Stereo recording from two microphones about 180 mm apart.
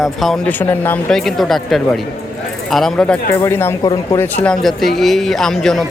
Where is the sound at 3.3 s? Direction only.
15° left (ahead or behind).